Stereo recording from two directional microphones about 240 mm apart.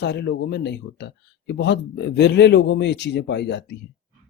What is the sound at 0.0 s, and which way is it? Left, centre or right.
Speech, left.